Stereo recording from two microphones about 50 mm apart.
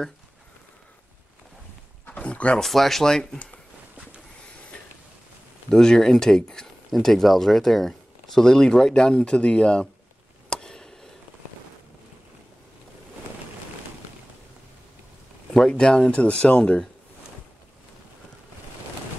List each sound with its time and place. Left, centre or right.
2.0 s a sound: left
2.6 s speech: centre
5.7 s speech: centre
10.5 s a sound: centre
15.8 s speech: centre
16.1 s speech: left